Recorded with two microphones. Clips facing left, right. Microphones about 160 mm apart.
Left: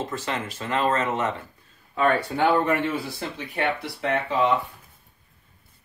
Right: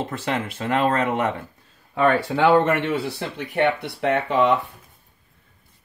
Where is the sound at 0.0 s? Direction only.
60° right (ahead or behind).